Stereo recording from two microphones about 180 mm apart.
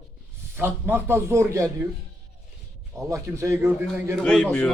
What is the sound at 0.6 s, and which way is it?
Speech, 10° right (ahead or behind).